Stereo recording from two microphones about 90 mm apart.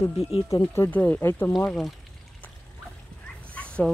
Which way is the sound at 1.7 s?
Centre (ahead or behind).